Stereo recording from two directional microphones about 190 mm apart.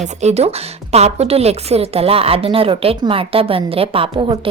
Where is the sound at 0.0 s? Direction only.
35° right (ahead or behind).